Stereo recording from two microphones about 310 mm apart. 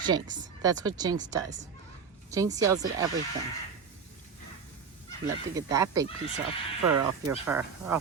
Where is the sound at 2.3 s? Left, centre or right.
Centre.